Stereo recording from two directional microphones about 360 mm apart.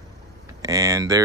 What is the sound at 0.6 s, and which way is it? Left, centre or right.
Speech, centre.